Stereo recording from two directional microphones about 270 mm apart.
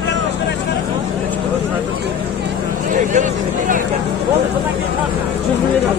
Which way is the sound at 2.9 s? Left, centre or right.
Right.